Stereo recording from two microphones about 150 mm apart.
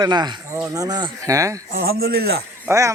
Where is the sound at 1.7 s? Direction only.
90° right.